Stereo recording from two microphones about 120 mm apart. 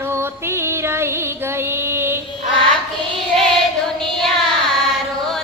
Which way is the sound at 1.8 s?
20° right (ahead or behind).